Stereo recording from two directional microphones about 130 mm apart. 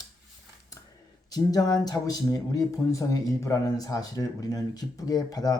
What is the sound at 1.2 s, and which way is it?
Speech, 30° left (ahead or behind).